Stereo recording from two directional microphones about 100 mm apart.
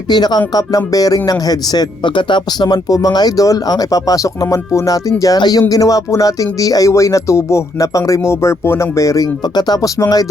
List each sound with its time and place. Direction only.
0.1 s speech: 45° left (ahead or behind)